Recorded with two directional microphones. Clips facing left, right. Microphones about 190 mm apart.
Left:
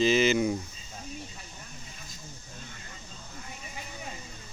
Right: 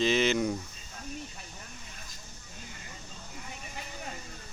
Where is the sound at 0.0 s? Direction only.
Centre (ahead or behind).